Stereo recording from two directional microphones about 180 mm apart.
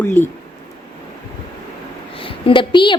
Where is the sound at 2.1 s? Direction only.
30° left (ahead or behind).